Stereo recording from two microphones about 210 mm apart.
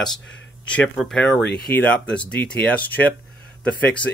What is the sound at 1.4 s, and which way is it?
Speech, 50° left (ahead or behind).